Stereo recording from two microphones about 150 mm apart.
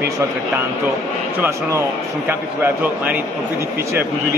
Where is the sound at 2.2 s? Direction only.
10° right (ahead or behind).